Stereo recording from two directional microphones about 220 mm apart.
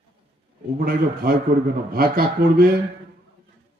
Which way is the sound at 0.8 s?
45° right (ahead or behind).